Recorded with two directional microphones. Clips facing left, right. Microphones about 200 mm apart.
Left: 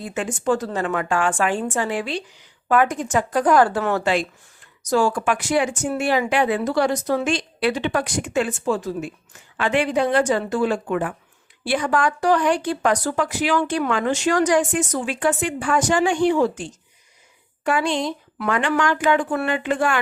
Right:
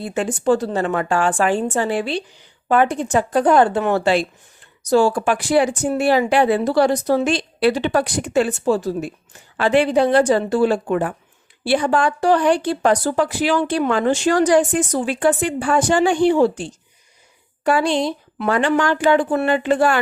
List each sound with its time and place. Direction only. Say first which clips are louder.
0.0 s a woman's voice: right 4 dB; 35° right (ahead or behind)